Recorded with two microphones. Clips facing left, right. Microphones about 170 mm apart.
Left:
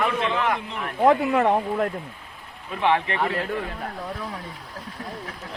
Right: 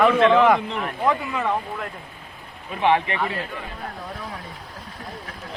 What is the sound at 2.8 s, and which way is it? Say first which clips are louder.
Speech: right 2 dB; 15° right (ahead or behind).